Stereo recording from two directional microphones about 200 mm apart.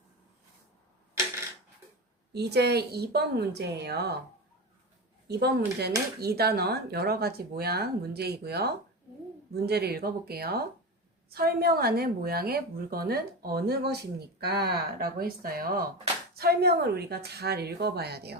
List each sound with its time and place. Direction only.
2.3 s a woman's voice: 55° right (ahead or behind)
5.3 s speech: 55° right (ahead or behind)